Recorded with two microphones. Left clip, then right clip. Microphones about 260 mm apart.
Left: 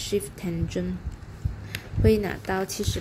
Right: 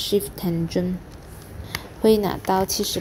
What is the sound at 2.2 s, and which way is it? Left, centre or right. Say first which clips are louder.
Speech: right 6 dB; centre.